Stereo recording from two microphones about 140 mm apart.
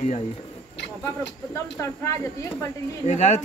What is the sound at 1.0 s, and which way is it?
Speech, 20° left (ahead or behind).